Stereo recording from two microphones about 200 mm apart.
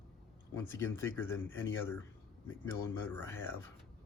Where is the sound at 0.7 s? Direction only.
10° left (ahead or behind).